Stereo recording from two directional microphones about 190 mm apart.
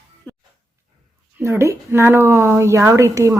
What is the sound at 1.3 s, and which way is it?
A woman's voice, 15° right (ahead or behind).